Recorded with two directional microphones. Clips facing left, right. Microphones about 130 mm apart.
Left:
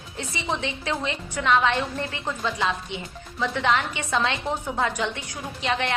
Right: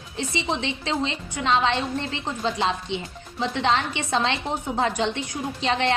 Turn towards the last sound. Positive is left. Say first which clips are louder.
# right 3 dB
turn(degrees=-30)  # may be behind; listen again after turning